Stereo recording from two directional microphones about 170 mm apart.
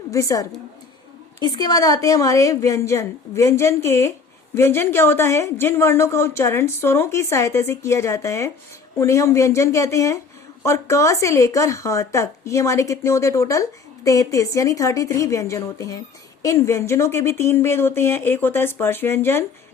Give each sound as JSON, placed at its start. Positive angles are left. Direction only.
{"t": 0.1, "sound": "a woman's voice", "side_deg": 20}